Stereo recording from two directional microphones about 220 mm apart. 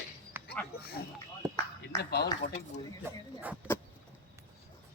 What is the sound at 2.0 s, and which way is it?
Speech, 45° left (ahead or behind).